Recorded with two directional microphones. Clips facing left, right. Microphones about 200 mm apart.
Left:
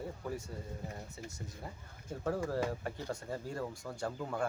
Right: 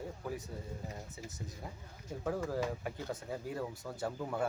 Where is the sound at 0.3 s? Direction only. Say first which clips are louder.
Right 1 dB; centre (ahead or behind).